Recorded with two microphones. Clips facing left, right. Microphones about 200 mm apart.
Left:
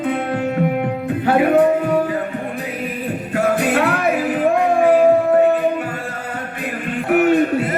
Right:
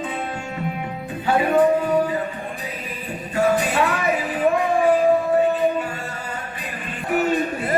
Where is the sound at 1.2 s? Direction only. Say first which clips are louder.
Left 4 dB; 60° left (ahead or behind).